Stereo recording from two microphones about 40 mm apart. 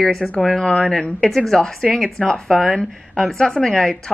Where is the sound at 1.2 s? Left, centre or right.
Centre.